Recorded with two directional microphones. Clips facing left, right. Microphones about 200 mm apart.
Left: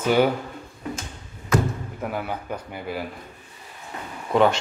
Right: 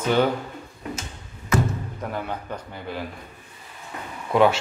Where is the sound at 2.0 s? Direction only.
5° left (ahead or behind).